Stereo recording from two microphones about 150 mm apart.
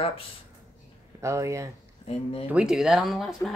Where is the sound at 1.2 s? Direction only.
20° right (ahead or behind).